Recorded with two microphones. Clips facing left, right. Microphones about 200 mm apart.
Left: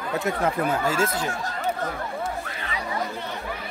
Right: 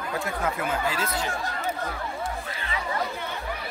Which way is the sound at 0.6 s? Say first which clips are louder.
Left 5 dB; 40° left (ahead or behind).